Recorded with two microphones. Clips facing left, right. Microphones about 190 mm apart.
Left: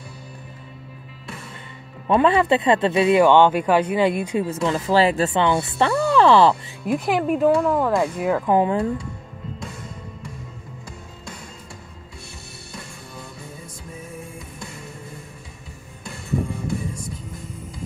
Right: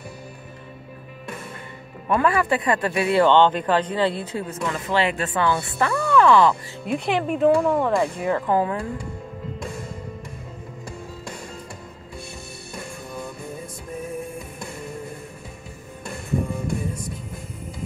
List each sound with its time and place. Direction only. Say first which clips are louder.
2.0 s speech: left 4 dB; 25° left (ahead or behind)
4.5 s speech: left 5 dB; 30° left (ahead or behind)
6.9 s speech: left 3 dB; centre (ahead or behind)
8.5 s speech: left 5 dB; 20° left (ahead or behind)